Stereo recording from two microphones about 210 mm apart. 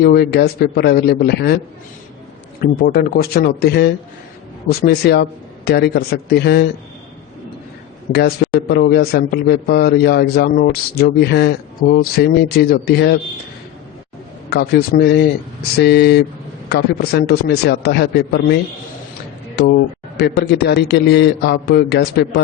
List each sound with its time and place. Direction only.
0.0 s a man's voice: 50° left (ahead or behind)
2.6 s a man's voice: 45° left (ahead or behind)
8.1 s a man's voice: 50° left (ahead or behind)
14.5 s a man's voice: 50° left (ahead or behind)
19.5 s a man's voice: 55° left (ahead or behind)